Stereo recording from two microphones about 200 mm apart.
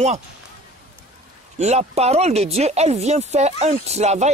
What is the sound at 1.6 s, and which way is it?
Speech, 35° right (ahead or behind).